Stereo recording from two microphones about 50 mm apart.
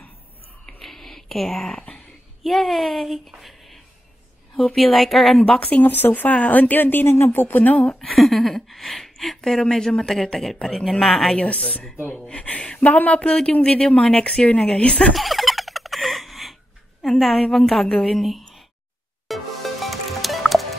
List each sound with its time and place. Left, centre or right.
0.7 s whispering: centre
1.5 s speech: centre
2.4 s speech: centre
5.7 s speech: left
6.3 s speech: left
7.8 s speech: centre
8.2 s speech: centre
11.3 s speech: left
12.3 s a sound: left
12.8 s speech: left
15.1 s fowl: centre
17.0 s a woman's voice: centre
19.2 s music: centre